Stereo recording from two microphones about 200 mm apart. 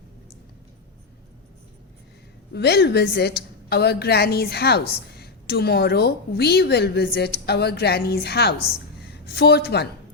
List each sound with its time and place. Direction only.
2.5 s a woman's voice: 55° left (ahead or behind)